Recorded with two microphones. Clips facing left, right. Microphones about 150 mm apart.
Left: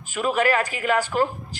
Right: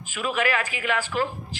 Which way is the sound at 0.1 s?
35° left (ahead or behind).